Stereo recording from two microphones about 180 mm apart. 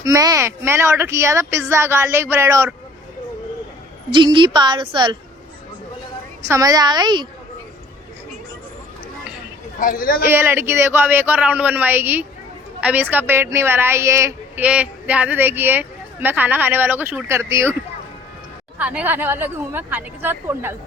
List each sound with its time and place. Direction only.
0.0 s a woman's voice: 20° right (ahead or behind)
4.1 s a woman's voice: 25° right (ahead or behind)
6.4 s a woman's voice: 15° right (ahead or behind)
9.8 s a man's voice: 50° left (ahead or behind)
10.2 s a woman's voice: 10° right (ahead or behind)
18.8 s a woman's voice: 10° right (ahead or behind)